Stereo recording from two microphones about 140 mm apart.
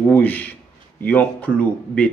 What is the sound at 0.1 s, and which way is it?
Speech, 10° left (ahead or behind).